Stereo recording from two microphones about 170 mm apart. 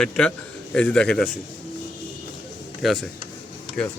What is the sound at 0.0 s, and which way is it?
A man's voice, 5° left (ahead or behind).